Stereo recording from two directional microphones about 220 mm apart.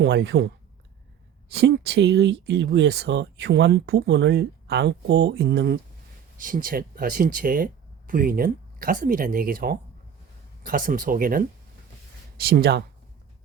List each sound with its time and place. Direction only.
0.0 s speech: 50° right (ahead or behind)